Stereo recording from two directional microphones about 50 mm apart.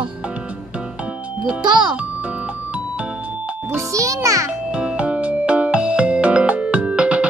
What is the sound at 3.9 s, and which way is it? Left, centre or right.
Speech, right.